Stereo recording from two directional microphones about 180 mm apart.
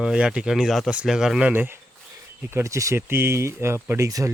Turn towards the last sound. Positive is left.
turn(degrees=-15)  # may be behind; listen again after turning